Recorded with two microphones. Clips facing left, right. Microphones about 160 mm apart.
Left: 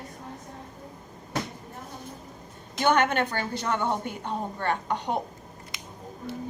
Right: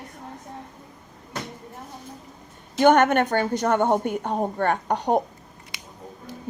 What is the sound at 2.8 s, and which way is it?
A woman's voice, 50° right (ahead or behind).